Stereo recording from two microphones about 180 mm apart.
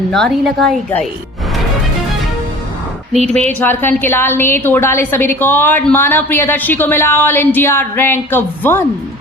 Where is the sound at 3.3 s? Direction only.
10° left (ahead or behind).